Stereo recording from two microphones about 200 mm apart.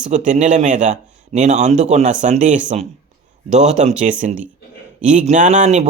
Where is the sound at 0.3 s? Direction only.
35° right (ahead or behind).